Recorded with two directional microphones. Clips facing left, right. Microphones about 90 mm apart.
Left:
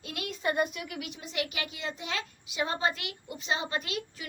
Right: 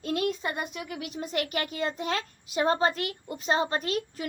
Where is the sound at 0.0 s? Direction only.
40° right (ahead or behind).